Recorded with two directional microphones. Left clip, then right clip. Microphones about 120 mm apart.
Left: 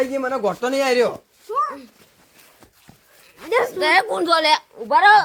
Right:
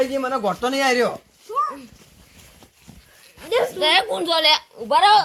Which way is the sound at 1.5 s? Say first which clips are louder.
Left 1 dB; 15° left (ahead or behind).